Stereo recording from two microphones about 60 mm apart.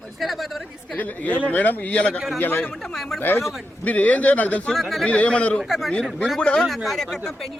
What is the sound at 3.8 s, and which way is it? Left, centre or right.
Speech, left.